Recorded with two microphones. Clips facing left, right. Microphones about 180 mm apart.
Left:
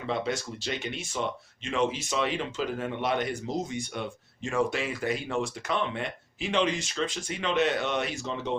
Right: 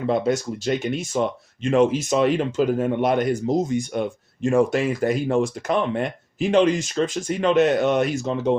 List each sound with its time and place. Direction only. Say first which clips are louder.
0.1 s speech: right 8 dB; 45° right (ahead or behind)